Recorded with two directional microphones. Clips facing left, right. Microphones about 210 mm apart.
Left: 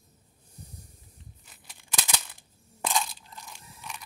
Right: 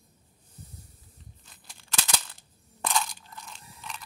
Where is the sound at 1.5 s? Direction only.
10° left (ahead or behind).